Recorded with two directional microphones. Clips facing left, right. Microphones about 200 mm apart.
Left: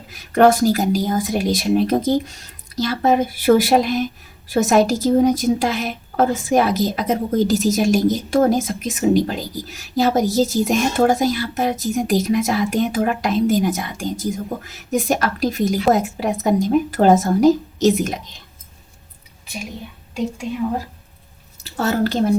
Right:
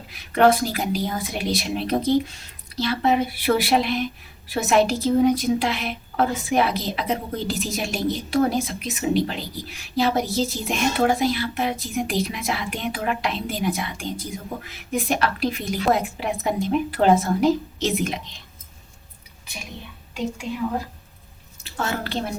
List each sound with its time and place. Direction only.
0.1 s a woman's voice: 45° left (ahead or behind)
21.6 s a woman's voice: 40° left (ahead or behind)